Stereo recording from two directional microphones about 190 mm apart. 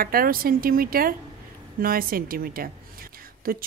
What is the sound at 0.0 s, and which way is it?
A woman's voice, 50° right (ahead or behind).